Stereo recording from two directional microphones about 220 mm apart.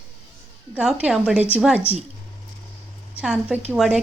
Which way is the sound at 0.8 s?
5° right (ahead or behind).